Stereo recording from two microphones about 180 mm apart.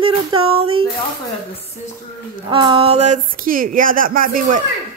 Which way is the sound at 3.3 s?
50° right (ahead or behind).